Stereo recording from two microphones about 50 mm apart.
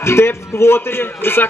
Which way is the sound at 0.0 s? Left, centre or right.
Left.